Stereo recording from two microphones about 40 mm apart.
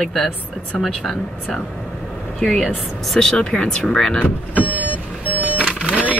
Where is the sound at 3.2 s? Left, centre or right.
Centre.